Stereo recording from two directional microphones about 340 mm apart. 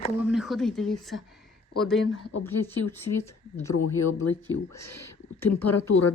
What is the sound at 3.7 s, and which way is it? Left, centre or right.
Speech, left.